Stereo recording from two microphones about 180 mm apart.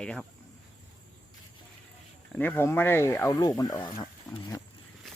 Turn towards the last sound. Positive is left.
turn(degrees=20)  # may be behind; listen again after turning